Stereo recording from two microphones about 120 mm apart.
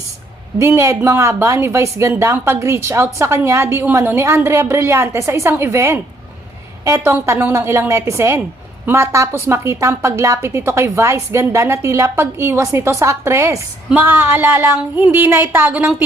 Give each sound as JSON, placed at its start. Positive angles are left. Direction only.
{"t": 0.6, "sound": "a woman's voice", "side_deg": -20}